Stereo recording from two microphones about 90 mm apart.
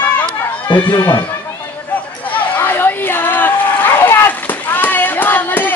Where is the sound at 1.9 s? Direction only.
15° left (ahead or behind).